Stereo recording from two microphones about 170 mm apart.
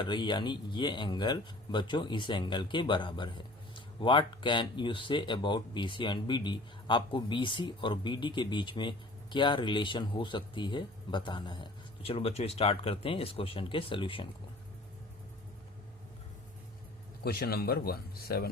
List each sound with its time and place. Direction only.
0.0 s speech: 25° left (ahead or behind)
17.2 s speech: 65° left (ahead or behind)